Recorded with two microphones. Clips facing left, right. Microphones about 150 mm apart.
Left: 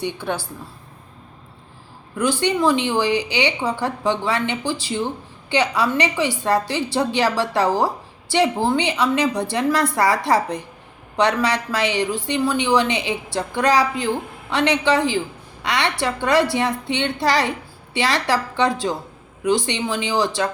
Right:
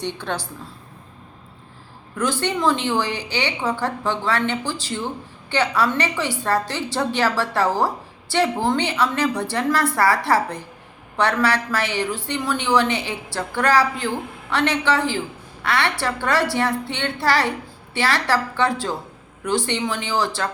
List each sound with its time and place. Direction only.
0.0 s a woman's voice: 10° left (ahead or behind)
2.1 s a woman's voice: 15° left (ahead or behind)